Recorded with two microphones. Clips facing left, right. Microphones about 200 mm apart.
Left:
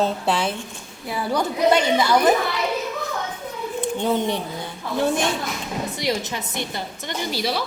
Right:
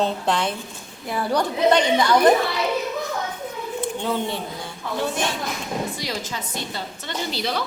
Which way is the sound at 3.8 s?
15° left (ahead or behind).